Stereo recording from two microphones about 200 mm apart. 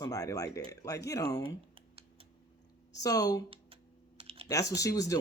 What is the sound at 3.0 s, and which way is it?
Speech, 20° left (ahead or behind).